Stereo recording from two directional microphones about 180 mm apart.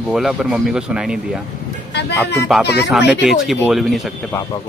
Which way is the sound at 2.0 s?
70° left (ahead or behind).